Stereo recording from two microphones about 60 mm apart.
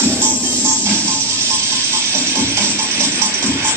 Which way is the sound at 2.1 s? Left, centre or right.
Right.